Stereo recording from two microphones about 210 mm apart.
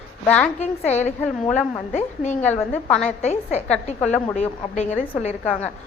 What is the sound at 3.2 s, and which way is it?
A woman's voice, 30° left (ahead or behind).